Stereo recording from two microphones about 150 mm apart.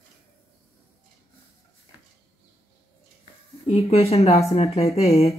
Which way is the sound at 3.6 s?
45° left (ahead or behind).